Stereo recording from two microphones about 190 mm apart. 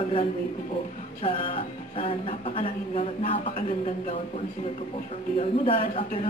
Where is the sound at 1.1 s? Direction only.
30° left (ahead or behind).